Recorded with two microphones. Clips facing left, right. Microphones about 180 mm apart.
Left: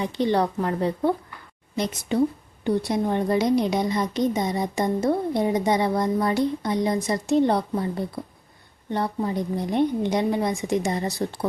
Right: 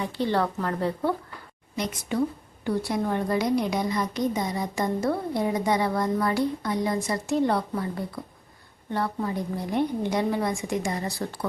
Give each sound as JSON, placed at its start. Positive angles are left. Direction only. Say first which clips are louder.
{"t": 0.0, "sound": "a woman's voice", "louder": "left 3 dB", "side_deg": 20}